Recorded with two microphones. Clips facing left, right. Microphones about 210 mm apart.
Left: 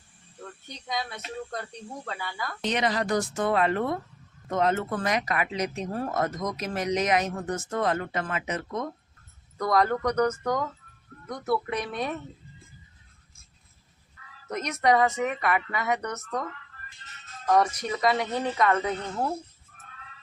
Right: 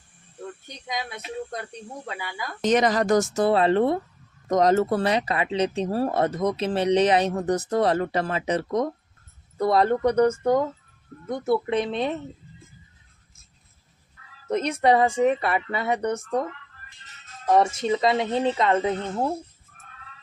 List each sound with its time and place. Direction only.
0.9 s speech: 15° right (ahead or behind)
2.6 s speech: 45° right (ahead or behind); by 12.2 s 25° right (ahead or behind)
14.5 s speech: 30° right (ahead or behind)